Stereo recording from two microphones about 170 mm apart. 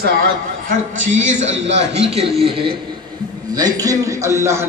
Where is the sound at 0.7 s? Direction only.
45° right (ahead or behind).